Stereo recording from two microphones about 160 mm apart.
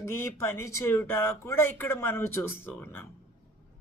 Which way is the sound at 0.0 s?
15° left (ahead or behind).